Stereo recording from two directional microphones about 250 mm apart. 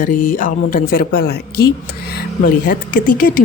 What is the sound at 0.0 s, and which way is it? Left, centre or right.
Speech, left.